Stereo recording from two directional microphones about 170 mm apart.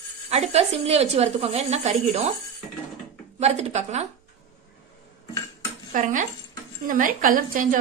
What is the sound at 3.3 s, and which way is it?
Speech, 40° right (ahead or behind).